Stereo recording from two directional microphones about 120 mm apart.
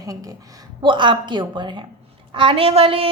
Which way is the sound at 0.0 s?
30° right (ahead or behind).